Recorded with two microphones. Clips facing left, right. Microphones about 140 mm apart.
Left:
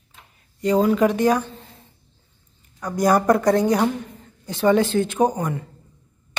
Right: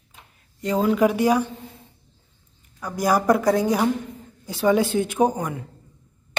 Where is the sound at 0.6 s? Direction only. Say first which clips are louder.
Left 2 dB; centre (ahead or behind).